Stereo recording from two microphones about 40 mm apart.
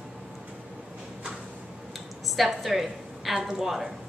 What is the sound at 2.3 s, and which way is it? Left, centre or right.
A woman's voice, centre.